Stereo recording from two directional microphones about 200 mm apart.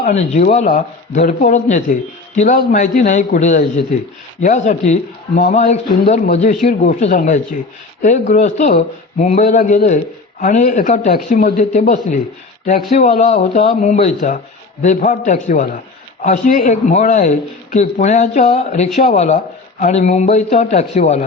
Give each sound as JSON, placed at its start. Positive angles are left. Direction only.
{"t": 0.0, "sound": "a man's voice", "side_deg": 35}